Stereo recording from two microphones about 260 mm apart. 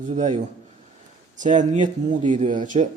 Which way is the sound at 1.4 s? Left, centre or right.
Right.